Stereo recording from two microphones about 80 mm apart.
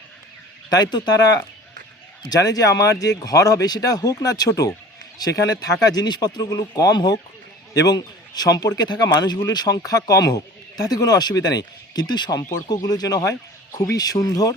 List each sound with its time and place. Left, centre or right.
0.7 s speech: left
2.3 s speech: left